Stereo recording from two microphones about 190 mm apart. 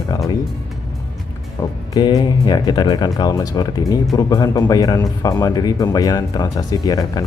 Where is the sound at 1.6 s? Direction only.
20° left (ahead or behind).